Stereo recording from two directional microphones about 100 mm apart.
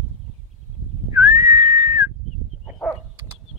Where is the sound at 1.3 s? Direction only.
35° right (ahead or behind).